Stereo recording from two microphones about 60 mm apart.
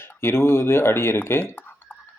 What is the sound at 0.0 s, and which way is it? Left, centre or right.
Speech, left.